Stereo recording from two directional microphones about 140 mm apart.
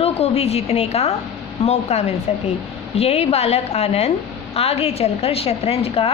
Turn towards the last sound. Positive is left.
turn(degrees=45)  # may be behind; listen again after turning